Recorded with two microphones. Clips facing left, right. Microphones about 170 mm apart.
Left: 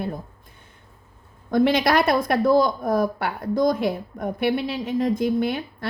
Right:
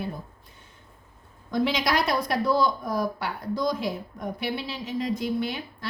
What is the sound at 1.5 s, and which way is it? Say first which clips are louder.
A woman's voice: left 6 dB; 55° left (ahead or behind).